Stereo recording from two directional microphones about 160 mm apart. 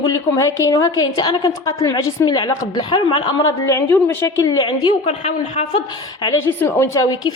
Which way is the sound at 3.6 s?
20° left (ahead or behind).